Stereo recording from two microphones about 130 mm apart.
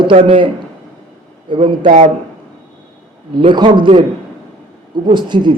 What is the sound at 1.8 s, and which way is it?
Speech, 70° right (ahead or behind).